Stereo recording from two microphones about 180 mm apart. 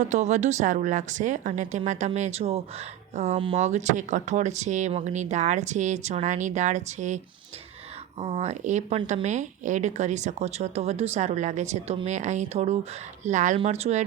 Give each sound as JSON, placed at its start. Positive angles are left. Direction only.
{"t": 0.0, "sound": "a woman's voice", "side_deg": -40}
{"t": 8.2, "sound": "a woman's voice", "side_deg": -35}